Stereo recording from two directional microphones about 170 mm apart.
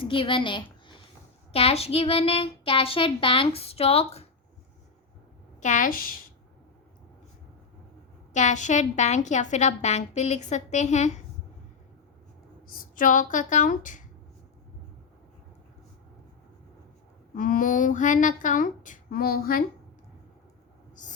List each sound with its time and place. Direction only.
0.0 s a woman's voice: 30° left (ahead or behind)
1.5 s child singing: 35° left (ahead or behind)
5.6 s a woman's voice: 50° left (ahead or behind)
8.3 s a woman's voice: 45° left (ahead or behind)
12.6 s a woman's voice: 55° left (ahead or behind)
17.3 s a woman's voice: 55° left (ahead or behind)